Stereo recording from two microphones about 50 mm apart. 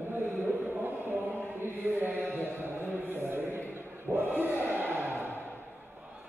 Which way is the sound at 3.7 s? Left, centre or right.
Right.